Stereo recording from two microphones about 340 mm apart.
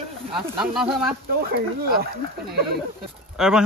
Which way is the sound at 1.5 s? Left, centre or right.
Right.